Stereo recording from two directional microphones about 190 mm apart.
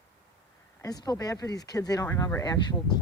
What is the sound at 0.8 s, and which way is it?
Speech, 20° left (ahead or behind).